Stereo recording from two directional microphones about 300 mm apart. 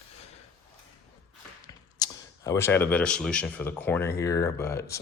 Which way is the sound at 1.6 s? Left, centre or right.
Centre.